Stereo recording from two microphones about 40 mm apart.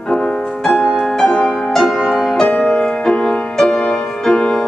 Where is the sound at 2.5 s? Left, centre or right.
Left.